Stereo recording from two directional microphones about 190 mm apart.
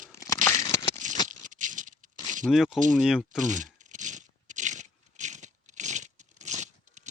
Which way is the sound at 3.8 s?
40° right (ahead or behind).